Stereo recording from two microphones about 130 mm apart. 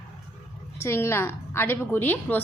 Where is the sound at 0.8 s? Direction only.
20° left (ahead or behind).